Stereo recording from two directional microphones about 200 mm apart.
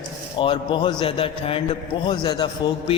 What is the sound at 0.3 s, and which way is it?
A man's voice, 25° left (ahead or behind).